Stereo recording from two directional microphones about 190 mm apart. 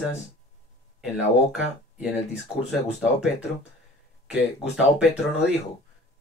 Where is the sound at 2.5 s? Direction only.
25° left (ahead or behind).